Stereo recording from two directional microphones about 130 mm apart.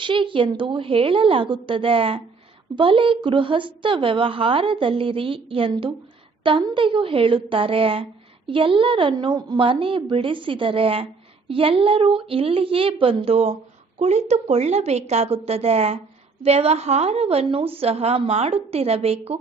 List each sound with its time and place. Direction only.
0.0 s a woman's voice: 40° right (ahead or behind)